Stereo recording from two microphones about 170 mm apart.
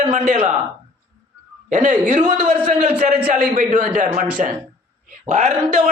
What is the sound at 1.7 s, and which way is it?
A man's voice, 45° right (ahead or behind).